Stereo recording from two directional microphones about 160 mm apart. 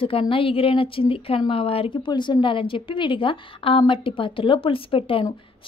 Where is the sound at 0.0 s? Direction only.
35° left (ahead or behind).